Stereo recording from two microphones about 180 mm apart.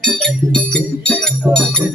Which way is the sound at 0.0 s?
Centre (ahead or behind).